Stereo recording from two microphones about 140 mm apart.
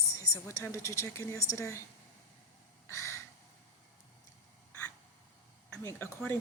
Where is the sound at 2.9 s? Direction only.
20° left (ahead or behind).